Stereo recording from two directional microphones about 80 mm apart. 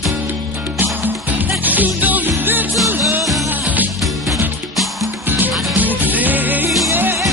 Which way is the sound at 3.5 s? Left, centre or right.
Right.